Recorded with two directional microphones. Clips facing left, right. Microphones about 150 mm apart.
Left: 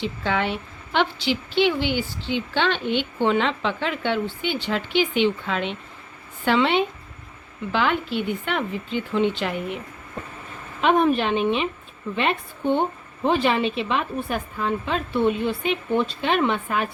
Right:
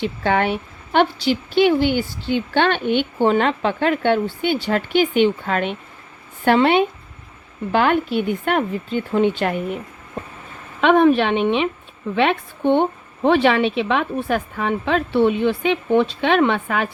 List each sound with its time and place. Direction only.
0.0 s a woman's voice: 55° right (ahead or behind)
10.8 s a woman's voice: 70° right (ahead or behind)